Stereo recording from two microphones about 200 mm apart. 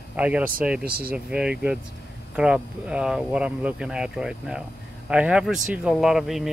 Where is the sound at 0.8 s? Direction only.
50° right (ahead or behind).